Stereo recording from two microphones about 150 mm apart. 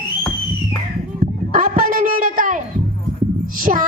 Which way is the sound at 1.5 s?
70° right (ahead or behind).